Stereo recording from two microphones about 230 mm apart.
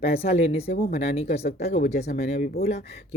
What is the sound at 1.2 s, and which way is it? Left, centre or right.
Speech, left.